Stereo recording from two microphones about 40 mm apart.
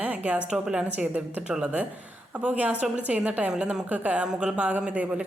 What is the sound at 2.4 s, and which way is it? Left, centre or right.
A woman's voice, right.